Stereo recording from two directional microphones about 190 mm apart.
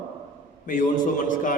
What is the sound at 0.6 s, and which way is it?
Speech, 45° left (ahead or behind).